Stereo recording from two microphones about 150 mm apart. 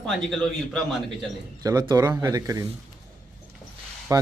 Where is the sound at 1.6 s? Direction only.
25° right (ahead or behind).